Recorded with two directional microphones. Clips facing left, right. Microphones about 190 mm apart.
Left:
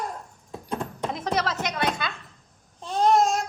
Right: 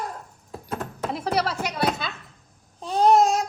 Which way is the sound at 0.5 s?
5° right (ahead or behind).